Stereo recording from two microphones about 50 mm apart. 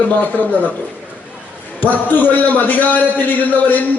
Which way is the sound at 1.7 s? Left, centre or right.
Left.